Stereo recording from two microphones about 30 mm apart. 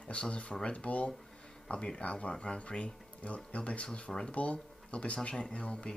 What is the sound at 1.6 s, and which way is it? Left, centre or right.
Speech, left.